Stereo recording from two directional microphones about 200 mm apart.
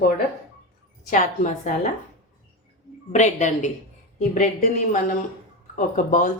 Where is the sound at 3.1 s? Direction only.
35° left (ahead or behind).